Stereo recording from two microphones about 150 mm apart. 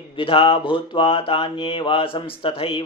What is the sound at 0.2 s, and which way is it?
Mantra, 35° left (ahead or behind).